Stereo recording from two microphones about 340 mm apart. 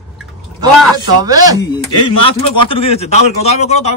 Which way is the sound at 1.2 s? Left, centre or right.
Centre.